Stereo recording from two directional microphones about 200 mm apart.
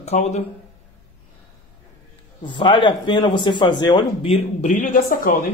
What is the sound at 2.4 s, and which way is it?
Speech, 25° left (ahead or behind).